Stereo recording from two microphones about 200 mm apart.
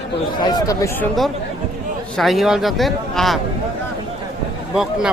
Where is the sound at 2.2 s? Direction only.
Centre (ahead or behind).